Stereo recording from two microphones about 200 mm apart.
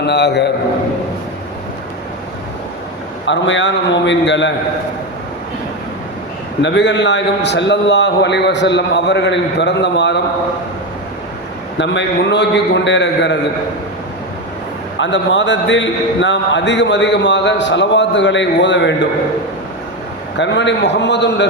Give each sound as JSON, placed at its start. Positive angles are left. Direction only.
{"t": 0.0, "sound": "a man's voice", "side_deg": 55}
{"t": 3.2, "sound": "a man's voice", "side_deg": 65}
{"t": 6.6, "sound": "a man's voice", "side_deg": 65}
{"t": 11.8, "sound": "a man's voice", "side_deg": 60}
{"t": 14.9, "sound": "a man's voice", "side_deg": 65}
{"t": 20.4, "sound": "a man's voice", "side_deg": 60}